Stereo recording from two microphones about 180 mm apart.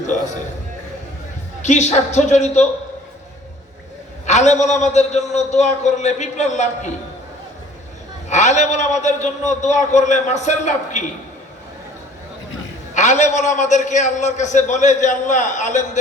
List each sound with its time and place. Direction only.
1.6 s a man's voice: 40° left (ahead or behind)
4.3 s a man's voice: 40° left (ahead or behind)
8.3 s a man's voice: 40° left (ahead or behind)
12.9 s a man's voice: 40° left (ahead or behind)